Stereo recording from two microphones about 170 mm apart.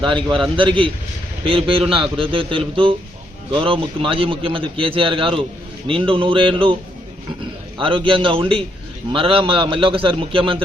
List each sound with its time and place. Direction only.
0.0 s a man's voice: 30° right (ahead or behind)
7.8 s a man's voice: 30° right (ahead or behind)